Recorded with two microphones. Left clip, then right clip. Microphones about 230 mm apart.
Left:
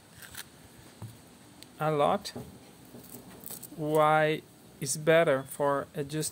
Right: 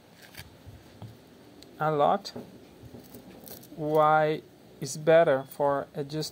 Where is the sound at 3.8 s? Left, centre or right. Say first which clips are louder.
Right 2 dB; centre.